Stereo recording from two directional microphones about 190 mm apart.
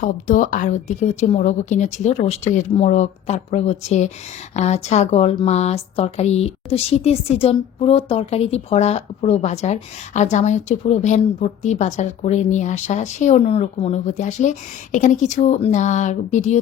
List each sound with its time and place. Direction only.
0.0 s speech: 40° left (ahead or behind)